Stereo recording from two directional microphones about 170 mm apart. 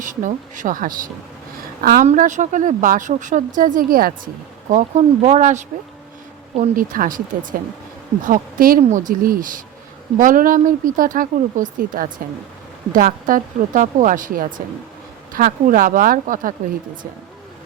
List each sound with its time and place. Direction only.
0.0 s a woman's voice: 50° right (ahead or behind)
2.0 s speech: 45° right (ahead or behind)
4.7 s speech: 45° right (ahead or behind)
8.2 s speech: 55° right (ahead or behind)